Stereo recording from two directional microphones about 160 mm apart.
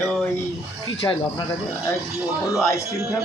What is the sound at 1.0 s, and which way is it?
Speech, 20° left (ahead or behind).